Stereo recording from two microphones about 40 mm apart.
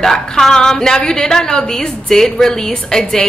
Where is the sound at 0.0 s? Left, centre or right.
Centre.